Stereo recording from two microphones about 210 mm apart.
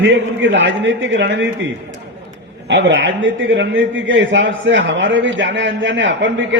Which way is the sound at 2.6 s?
55° right (ahead or behind).